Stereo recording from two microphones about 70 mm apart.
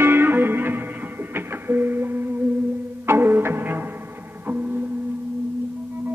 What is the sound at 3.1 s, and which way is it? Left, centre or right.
Music, right.